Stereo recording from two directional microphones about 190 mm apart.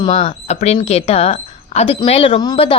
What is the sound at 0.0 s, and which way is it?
A woman's voice, 35° left (ahead or behind).